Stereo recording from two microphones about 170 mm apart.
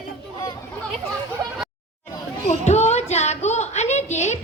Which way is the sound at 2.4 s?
40° left (ahead or behind).